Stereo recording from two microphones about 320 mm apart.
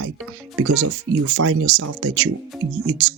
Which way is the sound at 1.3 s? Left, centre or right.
Right.